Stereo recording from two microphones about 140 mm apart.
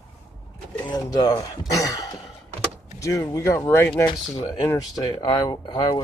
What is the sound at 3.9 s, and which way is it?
Speech, 35° left (ahead or behind).